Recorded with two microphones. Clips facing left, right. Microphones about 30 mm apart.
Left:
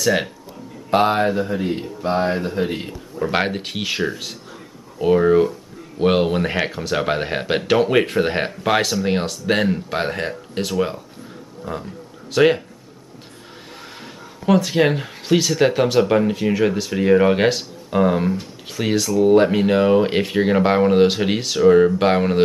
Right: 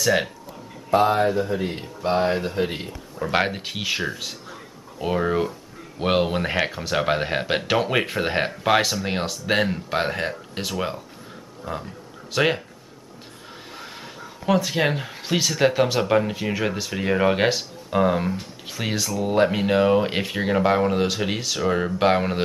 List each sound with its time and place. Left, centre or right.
0.0 s speech: centre
0.8 s speech: left
1.6 s speech: centre
3.2 s speech: centre
14.4 s speech: centre
20.6 s speech: centre